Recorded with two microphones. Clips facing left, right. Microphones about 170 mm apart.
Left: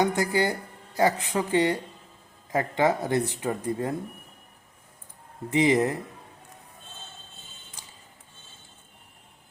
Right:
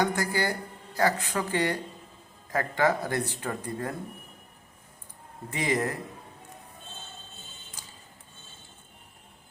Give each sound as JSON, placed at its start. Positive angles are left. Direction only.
{"t": 0.0, "sound": "speech", "side_deg": 20}
{"t": 5.5, "sound": "speech", "side_deg": 20}